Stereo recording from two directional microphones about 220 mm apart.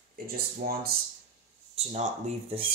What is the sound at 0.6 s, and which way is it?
Speech, 40° right (ahead or behind).